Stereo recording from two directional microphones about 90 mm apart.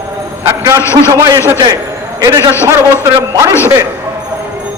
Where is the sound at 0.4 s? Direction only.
30° right (ahead or behind).